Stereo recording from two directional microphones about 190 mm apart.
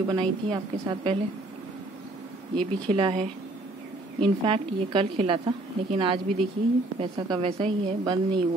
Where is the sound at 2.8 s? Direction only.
25° right (ahead or behind).